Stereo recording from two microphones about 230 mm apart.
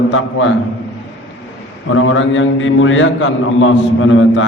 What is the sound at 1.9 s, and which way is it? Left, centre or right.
A man's voice, left.